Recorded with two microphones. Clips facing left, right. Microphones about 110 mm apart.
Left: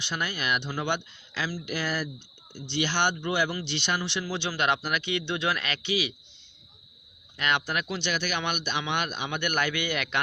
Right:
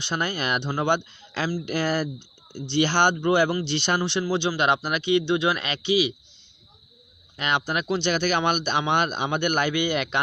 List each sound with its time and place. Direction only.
0.0 s speech: 40° right (ahead or behind); by 6.1 s 20° right (ahead or behind)
7.3 s speech: 25° right (ahead or behind)
9.5 s speech: 25° right (ahead or behind)